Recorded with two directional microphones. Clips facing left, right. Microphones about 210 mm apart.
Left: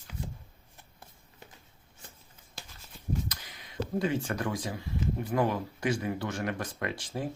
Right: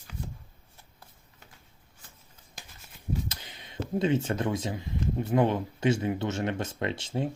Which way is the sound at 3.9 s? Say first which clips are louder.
Right 4 dB; 25° right (ahead or behind).